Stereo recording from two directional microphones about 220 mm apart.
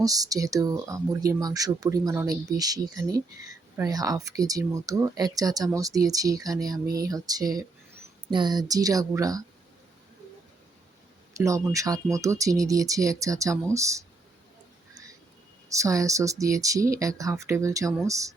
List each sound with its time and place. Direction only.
0.0 s speech: 15° right (ahead or behind)
11.3 s speech: 15° right (ahead or behind)
15.7 s speech: 15° right (ahead or behind)